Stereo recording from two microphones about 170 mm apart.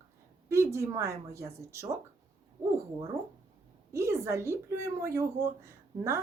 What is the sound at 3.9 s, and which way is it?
A woman's voice, 15° right (ahead or behind).